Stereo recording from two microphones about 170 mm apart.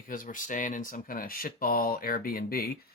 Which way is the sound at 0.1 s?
50° left (ahead or behind).